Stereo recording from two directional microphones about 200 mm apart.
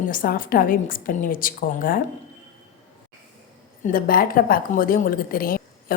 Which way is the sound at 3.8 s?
45° left (ahead or behind).